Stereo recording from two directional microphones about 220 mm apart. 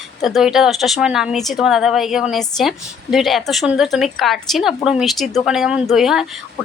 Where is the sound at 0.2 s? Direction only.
Centre (ahead or behind).